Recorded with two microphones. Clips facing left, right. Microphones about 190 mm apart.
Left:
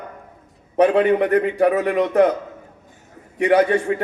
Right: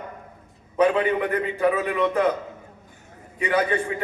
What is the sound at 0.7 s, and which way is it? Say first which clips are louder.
A man's voice: left 5 dB; 65° left (ahead or behind).